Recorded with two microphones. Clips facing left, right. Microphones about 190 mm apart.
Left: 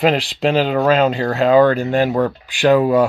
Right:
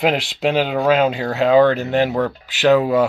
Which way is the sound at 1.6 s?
10° left (ahead or behind).